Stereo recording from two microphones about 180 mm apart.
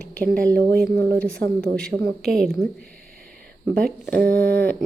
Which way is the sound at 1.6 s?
5° left (ahead or behind).